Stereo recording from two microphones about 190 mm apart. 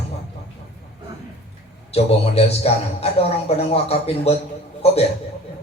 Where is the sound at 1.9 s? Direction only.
30° left (ahead or behind).